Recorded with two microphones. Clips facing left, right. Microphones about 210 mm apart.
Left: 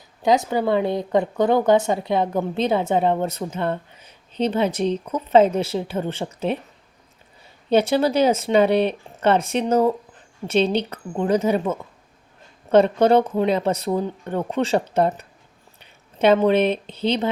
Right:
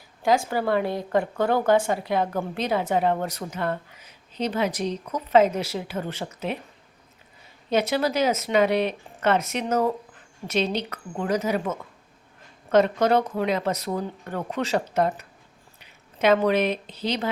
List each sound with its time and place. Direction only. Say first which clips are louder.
0.2 s speech: left 3 dB; 20° left (ahead or behind)
7.7 s speech: left 5 dB; 30° left (ahead or behind)